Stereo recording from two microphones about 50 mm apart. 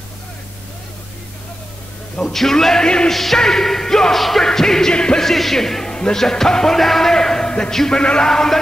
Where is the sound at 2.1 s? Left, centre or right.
Centre.